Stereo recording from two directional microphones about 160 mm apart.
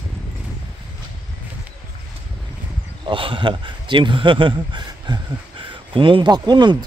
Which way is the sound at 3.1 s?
30° right (ahead or behind).